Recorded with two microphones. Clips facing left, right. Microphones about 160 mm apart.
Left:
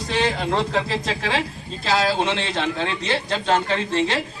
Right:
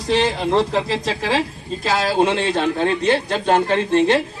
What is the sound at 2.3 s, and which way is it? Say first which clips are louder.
Speech: right 5 dB; 45° right (ahead or behind).